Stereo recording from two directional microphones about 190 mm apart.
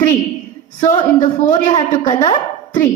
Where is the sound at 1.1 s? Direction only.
40° left (ahead or behind).